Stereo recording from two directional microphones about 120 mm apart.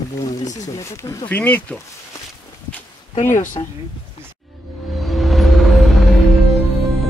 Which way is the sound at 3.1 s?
90° left.